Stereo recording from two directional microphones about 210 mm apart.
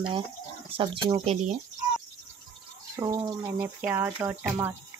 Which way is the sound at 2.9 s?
15° right (ahead or behind).